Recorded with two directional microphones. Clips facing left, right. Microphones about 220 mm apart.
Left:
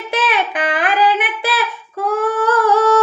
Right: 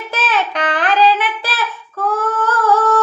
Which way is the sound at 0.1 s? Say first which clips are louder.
Left 1 dB; 15° left (ahead or behind).